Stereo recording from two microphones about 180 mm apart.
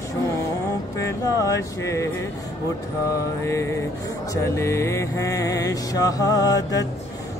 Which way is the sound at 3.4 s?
15° left (ahead or behind).